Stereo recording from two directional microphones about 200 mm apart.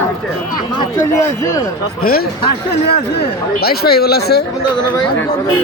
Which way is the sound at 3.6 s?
50° left (ahead or behind).